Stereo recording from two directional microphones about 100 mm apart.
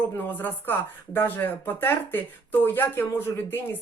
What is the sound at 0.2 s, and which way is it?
Speech, 20° left (ahead or behind).